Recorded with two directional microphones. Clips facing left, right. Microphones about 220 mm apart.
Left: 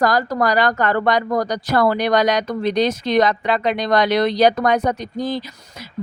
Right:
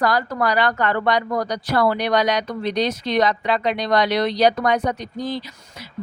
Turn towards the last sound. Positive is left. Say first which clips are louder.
# left 3 dB
turn(degrees=45)  # may be behind; listen again after turning